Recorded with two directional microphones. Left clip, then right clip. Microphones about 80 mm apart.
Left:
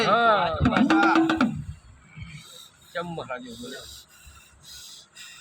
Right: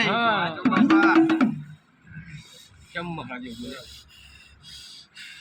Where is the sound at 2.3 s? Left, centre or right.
Left.